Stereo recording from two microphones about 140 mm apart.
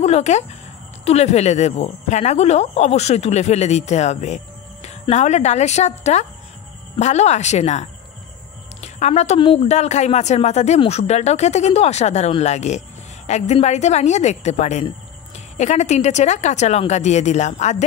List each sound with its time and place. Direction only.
0.0 s a woman's voice: 50° left (ahead or behind)